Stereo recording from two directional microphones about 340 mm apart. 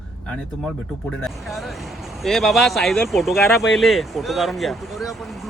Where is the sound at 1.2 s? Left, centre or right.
Centre.